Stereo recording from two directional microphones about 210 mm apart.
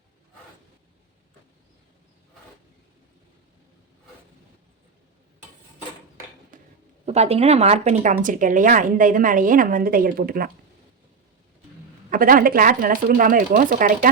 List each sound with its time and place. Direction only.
6.5 s a sound: 40° right (ahead or behind)
7.0 s speech: 30° right (ahead or behind)
12.1 s speech: 40° right (ahead or behind)